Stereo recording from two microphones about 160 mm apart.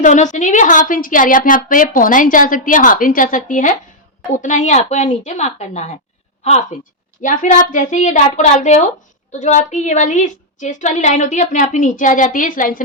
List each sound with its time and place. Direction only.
0.0 s a woman's voice: 50° left (ahead or behind)